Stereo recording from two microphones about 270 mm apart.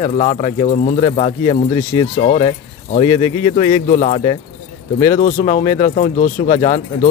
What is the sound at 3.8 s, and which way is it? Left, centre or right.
Speech, left.